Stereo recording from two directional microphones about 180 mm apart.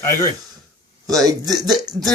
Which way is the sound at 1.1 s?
20° right (ahead or behind).